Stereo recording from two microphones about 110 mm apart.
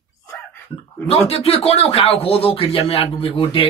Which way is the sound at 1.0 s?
65° left (ahead or behind).